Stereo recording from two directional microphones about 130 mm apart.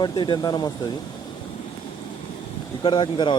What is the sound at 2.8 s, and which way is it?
Speech, 35° left (ahead or behind).